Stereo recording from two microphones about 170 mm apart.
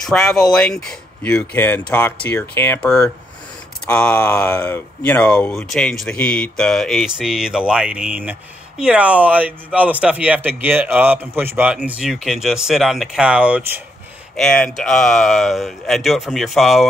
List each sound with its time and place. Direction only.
0.0 s speech: 5° left (ahead or behind)
14.3 s speech: 5° left (ahead or behind)